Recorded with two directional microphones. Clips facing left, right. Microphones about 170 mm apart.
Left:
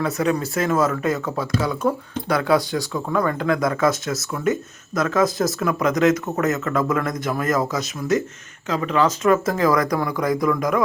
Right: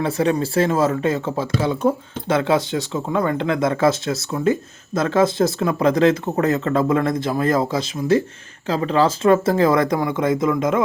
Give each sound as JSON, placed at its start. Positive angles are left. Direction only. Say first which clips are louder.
{"t": 0.0, "sound": "speech", "louder": "right 2 dB", "side_deg": -30}